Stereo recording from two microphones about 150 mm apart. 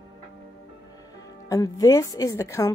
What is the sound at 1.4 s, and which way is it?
A woman's voice, 20° left (ahead or behind).